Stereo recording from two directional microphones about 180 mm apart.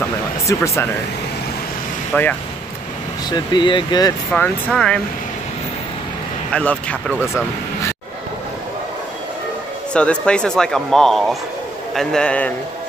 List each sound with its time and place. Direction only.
0.0 s a sound: 15° left (ahead or behind)
2.1 s speech: 10° left (ahead or behind)
3.3 s speech: 25° left (ahead or behind)
4.3 s speech: 5° left (ahead or behind)
6.5 s speech: 5° left (ahead or behind)
7.1 s speech: 10° right (ahead or behind)
9.9 s speech: 5° left (ahead or behind)